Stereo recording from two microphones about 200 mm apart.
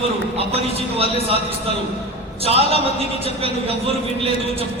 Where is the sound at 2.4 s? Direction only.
30° right (ahead or behind).